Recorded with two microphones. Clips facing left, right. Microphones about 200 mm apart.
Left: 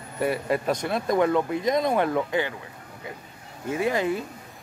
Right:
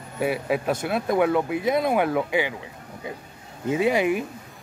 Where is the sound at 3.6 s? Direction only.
15° right (ahead or behind).